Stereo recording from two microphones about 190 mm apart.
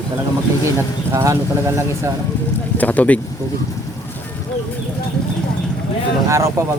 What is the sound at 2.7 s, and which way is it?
Speech, 10° left (ahead or behind).